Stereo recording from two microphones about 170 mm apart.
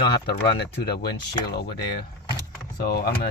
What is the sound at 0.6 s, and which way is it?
Speech, 70° left (ahead or behind).